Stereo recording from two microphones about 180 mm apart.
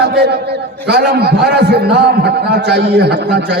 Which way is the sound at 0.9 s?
65° right (ahead or behind).